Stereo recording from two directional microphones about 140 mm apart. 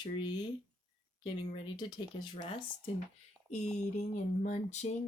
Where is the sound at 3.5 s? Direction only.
55° left (ahead or behind).